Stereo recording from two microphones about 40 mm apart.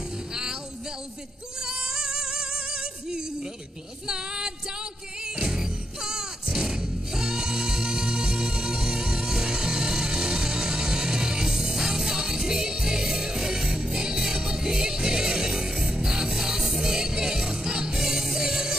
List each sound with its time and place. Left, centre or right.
0.3 s music: centre
1.6 s music: centre